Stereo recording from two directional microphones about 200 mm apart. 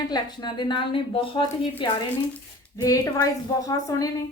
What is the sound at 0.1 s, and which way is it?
A woman's voice, 25° left (ahead or behind).